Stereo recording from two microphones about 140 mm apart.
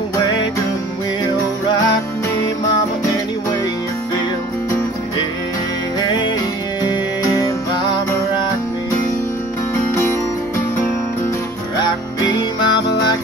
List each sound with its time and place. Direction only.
6.8 s music: 30° left (ahead or behind)
11.8 s music: 30° left (ahead or behind)